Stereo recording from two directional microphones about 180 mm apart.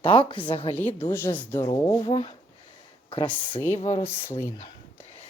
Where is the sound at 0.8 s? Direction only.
10° left (ahead or behind).